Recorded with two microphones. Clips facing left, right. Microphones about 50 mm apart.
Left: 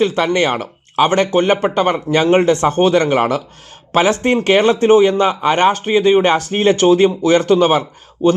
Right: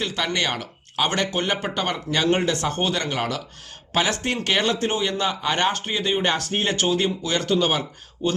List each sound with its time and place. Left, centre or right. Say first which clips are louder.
0.0 s speech: left 10 dB; left